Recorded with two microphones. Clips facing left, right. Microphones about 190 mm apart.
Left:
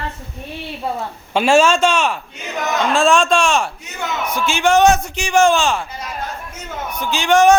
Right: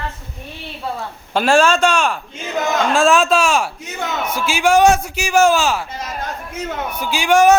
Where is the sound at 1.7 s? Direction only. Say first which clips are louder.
Even; 10° right (ahead or behind).